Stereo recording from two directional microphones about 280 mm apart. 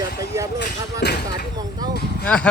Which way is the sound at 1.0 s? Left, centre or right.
Left.